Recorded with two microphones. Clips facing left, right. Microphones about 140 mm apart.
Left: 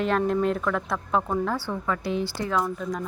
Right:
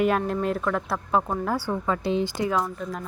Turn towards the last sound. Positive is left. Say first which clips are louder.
# left 2 dB
turn(degrees=-5)  # may be behind; listen again after turning